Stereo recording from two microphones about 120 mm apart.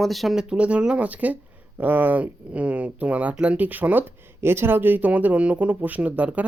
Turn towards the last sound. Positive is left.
turn(degrees=-10)  # may be behind; listen again after turning